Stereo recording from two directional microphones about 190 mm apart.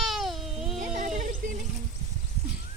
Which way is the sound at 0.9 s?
40° right (ahead or behind).